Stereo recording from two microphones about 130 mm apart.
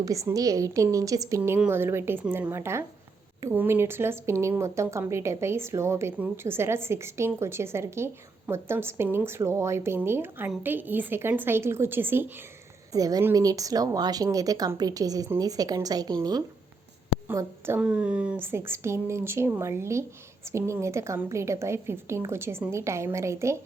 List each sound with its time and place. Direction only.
0.0 s speech: 25° right (ahead or behind)
1.4 s a woman's voice: 15° right (ahead or behind)
12.9 s speech: 30° right (ahead or behind)
17.2 s speech: 15° right (ahead or behind)